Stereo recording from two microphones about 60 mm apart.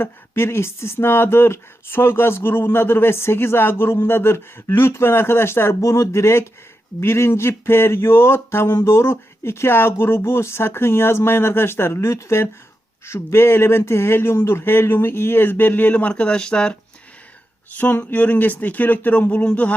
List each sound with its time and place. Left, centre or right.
0.0 s speech: left; by 16.7 s centre
17.7 s speech: left